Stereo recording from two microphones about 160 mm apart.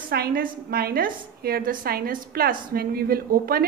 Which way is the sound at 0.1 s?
70° right (ahead or behind).